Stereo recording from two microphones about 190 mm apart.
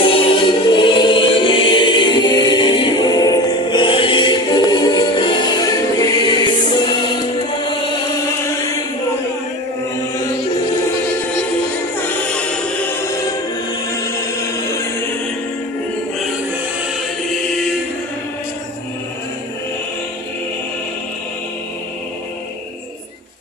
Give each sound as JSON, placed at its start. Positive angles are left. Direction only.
{"t": 0.0, "sound": "music", "side_deg": 30}
{"t": 12.0, "sound": "music", "side_deg": 5}